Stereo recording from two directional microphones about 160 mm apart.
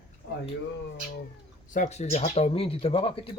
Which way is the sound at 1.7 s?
50° left (ahead or behind).